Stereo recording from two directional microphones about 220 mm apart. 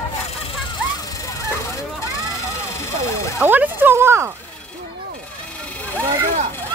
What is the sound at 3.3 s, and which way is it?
Speech, 5° right (ahead or behind).